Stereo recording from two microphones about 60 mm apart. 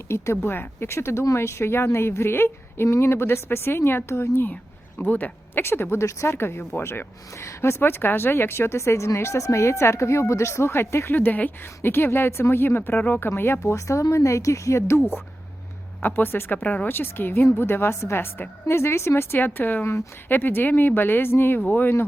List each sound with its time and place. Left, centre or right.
0.1 s a woman's voice: left
0.4 s a woman's voice: left
4.9 s speech: left
5.6 s a woman's voice: left
7.3 s a woman's voice: left
11.1 s speech: left
11.6 s a woman's voice: left
16.0 s a woman's voice: left
16.6 s a woman's voice: left